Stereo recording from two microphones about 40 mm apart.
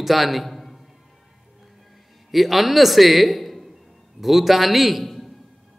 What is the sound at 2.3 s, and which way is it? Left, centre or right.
A man's voice, centre.